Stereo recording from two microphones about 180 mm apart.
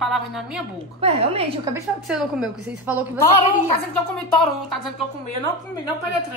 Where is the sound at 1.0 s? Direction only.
35° right (ahead or behind).